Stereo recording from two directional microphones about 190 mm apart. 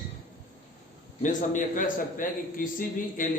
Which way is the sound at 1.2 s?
40° left (ahead or behind).